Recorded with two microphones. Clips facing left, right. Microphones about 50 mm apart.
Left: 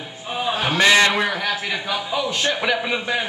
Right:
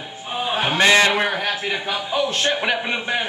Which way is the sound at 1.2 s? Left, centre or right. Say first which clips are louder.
Right 1 dB; right.